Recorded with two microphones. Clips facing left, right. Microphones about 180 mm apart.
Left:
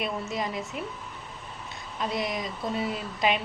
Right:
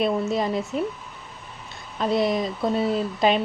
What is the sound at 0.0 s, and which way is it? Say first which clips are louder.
Speech: right 8 dB; 30° right (ahead or behind).